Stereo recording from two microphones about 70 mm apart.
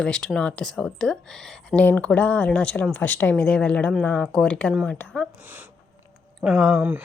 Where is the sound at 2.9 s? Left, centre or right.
Left.